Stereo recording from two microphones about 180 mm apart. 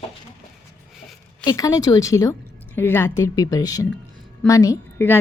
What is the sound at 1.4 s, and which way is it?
A woman's voice, 20° left (ahead or behind).